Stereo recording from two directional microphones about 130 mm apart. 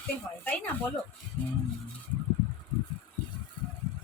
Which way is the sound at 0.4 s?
10° left (ahead or behind).